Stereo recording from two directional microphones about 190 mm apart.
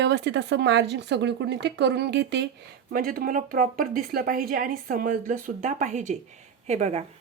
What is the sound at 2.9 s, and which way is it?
Speech, 50° right (ahead or behind).